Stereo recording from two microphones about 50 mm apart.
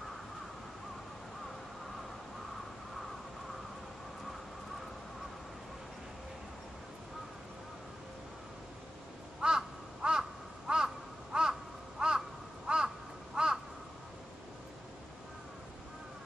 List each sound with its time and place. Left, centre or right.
9.4 s crow: centre